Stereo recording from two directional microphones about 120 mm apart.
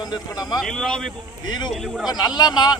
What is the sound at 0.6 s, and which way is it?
Speech, 5° left (ahead or behind).